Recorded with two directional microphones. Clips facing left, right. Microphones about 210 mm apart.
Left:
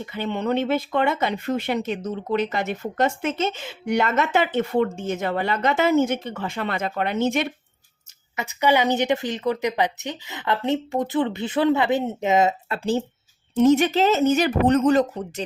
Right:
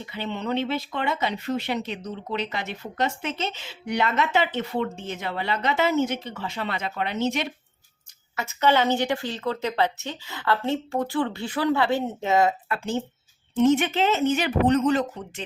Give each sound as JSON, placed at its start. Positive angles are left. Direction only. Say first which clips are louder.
{"t": 0.0, "sound": "speech", "louder": "left 4 dB", "side_deg": 50}
{"t": 8.4, "sound": "speech", "louder": "left 1 dB", "side_deg": 15}